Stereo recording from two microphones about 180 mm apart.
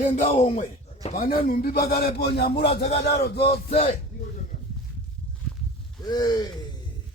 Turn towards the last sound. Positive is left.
turn(degrees=20)  # may be behind; listen again after turning